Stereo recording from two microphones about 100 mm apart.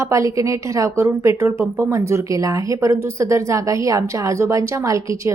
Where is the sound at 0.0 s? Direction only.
35° right (ahead or behind).